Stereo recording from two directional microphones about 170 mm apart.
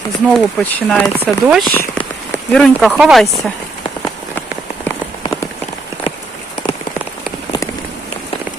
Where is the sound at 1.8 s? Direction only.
10° left (ahead or behind).